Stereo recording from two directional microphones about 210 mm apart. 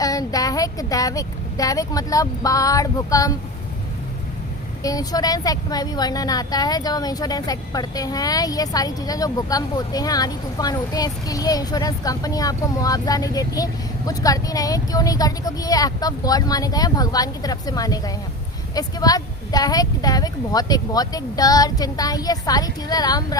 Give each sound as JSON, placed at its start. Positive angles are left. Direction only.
{"t": 0.0, "sound": "speech", "side_deg": 15}
{"t": 4.8, "sound": "a woman's voice", "side_deg": 15}